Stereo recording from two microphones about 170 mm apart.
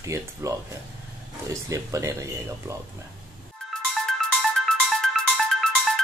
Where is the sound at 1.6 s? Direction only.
20° right (ahead or behind).